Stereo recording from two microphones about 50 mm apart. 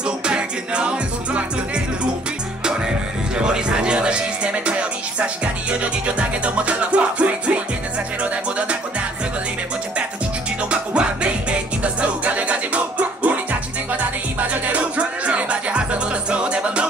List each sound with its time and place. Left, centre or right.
0.0 s music: centre
2.6 s music: centre
10.7 s music: right